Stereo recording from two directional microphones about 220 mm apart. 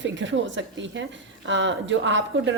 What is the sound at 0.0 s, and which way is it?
A woman's voice, 55° right (ahead or behind).